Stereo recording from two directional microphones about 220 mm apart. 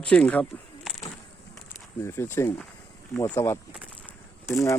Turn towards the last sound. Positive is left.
turn(degrees=15)  # may be behind; listen again after turning